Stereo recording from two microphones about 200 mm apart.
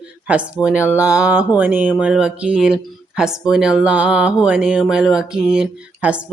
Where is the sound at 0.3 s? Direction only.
5° right (ahead or behind).